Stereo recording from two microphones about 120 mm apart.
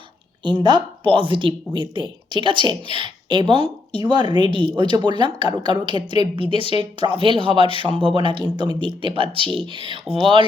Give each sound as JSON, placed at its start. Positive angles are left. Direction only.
{"t": 0.4, "sound": "a man's voice", "side_deg": -40}